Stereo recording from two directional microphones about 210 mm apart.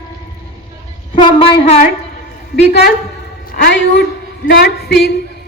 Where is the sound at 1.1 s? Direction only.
25° left (ahead or behind).